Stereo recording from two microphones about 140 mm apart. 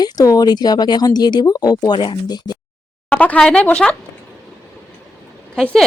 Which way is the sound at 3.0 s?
10° left (ahead or behind).